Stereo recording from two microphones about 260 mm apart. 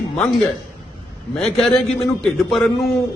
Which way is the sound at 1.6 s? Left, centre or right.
Centre.